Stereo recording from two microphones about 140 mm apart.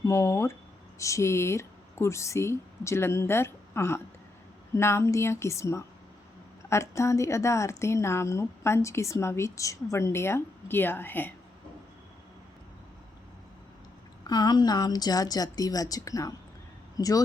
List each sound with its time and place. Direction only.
0.0 s a woman's voice: 20° left (ahead or behind)
14.3 s a woman's voice: 30° left (ahead or behind)